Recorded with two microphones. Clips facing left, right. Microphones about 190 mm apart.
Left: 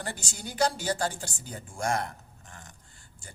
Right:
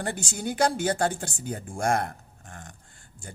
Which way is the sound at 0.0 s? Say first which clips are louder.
Right 7 dB; 55° right (ahead or behind).